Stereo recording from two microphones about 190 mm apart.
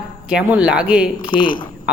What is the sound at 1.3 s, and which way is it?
Speech, 25° left (ahead or behind).